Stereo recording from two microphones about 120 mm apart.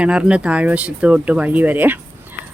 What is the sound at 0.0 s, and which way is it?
Speech, 10° right (ahead or behind).